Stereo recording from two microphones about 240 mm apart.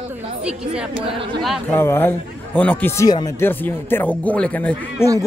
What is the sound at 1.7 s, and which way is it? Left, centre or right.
A man's voice, centre.